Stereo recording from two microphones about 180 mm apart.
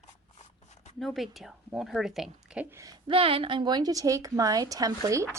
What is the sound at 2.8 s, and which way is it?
A woman's voice, 25° right (ahead or behind).